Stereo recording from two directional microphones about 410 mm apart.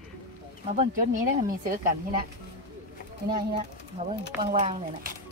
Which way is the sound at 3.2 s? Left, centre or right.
Centre.